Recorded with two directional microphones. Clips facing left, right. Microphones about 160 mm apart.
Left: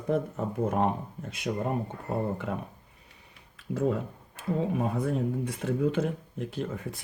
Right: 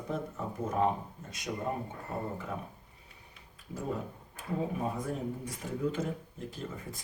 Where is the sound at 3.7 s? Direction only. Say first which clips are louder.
Left 8 dB; 65° left (ahead or behind).